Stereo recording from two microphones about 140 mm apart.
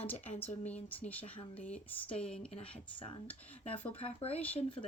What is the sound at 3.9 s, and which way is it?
Speech, 45° left (ahead or behind).